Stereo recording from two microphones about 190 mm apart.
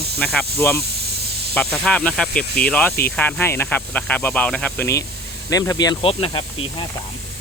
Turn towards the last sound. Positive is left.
turn(degrees=30)  # may be behind; listen again after turning